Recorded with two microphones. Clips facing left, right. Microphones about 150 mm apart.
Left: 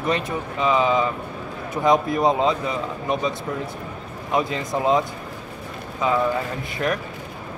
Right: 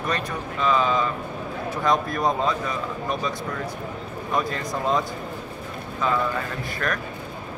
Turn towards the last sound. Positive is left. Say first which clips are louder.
# left 4 dB
turn(degrees=20)  # may be behind; listen again after turning